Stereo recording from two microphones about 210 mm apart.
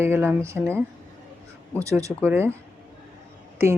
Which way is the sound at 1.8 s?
15° right (ahead or behind).